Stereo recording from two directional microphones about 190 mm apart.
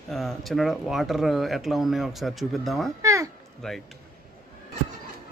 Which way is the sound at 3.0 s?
15° right (ahead or behind).